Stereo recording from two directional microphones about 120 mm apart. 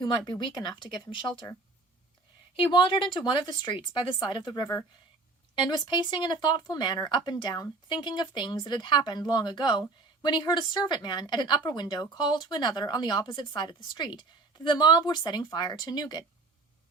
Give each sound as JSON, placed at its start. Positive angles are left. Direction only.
{"t": 0.0, "sound": "speech", "side_deg": 35}
{"t": 2.6, "sound": "speech", "side_deg": 45}